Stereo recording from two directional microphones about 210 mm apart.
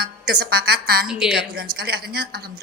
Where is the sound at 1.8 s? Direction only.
45° right (ahead or behind).